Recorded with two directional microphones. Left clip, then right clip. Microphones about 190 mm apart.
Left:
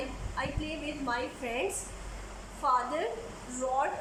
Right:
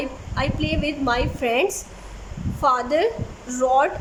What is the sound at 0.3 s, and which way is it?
A woman's voice, 60° right (ahead or behind).